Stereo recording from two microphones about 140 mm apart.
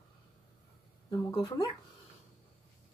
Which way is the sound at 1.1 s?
30° left (ahead or behind).